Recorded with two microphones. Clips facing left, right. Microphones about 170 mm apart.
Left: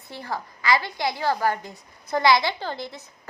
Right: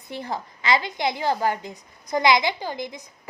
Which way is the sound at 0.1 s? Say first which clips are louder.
Right 2 dB; 20° right (ahead or behind).